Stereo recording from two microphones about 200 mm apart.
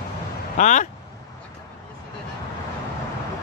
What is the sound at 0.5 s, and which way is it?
Speech, 40° left (ahead or behind).